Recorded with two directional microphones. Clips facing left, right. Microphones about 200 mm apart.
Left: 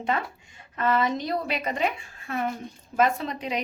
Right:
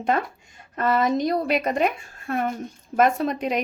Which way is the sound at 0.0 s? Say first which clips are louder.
Right 4 dB; 45° right (ahead or behind).